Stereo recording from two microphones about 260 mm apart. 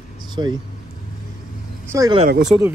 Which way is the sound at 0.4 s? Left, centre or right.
Centre.